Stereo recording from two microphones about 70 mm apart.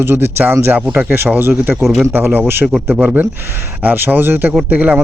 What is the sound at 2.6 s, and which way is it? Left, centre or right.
Speech, centre.